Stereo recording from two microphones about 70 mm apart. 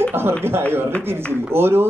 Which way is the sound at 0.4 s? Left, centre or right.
Right.